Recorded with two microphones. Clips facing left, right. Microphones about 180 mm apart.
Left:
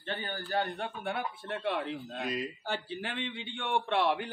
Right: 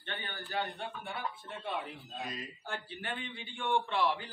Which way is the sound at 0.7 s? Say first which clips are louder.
Left 6 dB; 70° left (ahead or behind).